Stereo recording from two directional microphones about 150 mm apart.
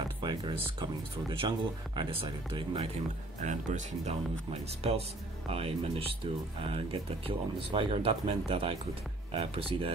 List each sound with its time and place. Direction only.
0.2 s speech: 30° right (ahead or behind)
2.0 s speech: 35° right (ahead or behind)
3.3 s speech: 55° right (ahead or behind); by 9.9 s 40° right (ahead or behind)